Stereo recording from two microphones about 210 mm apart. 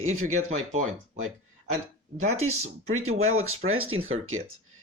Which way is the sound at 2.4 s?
90° right.